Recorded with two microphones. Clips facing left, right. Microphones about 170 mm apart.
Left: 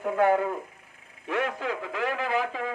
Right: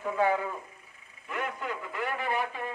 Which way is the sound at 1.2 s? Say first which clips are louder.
Left 6 dB; 90° left.